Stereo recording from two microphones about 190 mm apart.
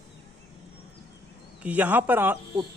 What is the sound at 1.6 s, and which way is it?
A woman's voice, 10° right (ahead or behind).